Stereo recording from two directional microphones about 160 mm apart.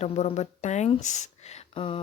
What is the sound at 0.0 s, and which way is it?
Speech, 45° left (ahead or behind).